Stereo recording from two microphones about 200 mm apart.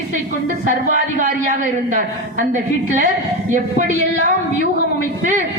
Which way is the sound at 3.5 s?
40° right (ahead or behind).